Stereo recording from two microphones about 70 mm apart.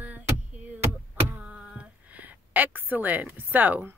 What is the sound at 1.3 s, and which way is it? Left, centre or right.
A woman's voice, centre.